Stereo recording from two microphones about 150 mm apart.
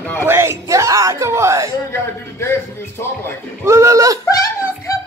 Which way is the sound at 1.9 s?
15° left (ahead or behind).